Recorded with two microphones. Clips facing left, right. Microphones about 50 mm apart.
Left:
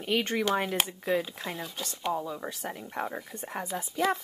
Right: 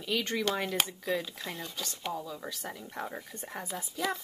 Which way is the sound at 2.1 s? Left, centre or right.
Left.